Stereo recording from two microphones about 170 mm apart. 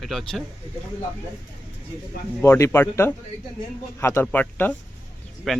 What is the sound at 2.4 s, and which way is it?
A man's voice, 15° left (ahead or behind).